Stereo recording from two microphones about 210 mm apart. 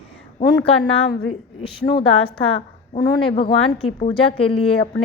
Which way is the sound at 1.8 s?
45° left (ahead or behind).